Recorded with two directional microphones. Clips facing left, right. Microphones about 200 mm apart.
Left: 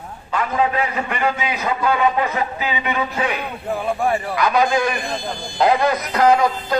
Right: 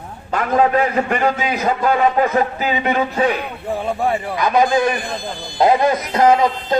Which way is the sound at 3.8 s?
20° right (ahead or behind).